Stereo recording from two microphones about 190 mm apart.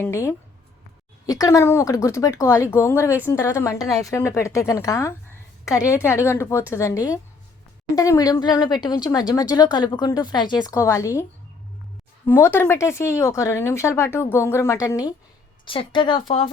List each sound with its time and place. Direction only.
0.0 s speech: 15° left (ahead or behind)